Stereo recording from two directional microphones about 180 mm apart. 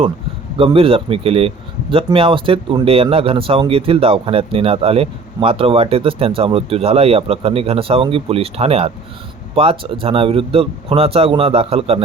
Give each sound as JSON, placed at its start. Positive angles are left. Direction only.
{"t": 0.5, "sound": "speech", "side_deg": -30}